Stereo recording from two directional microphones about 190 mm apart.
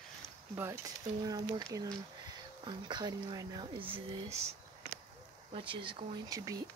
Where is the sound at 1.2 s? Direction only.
20° right (ahead or behind).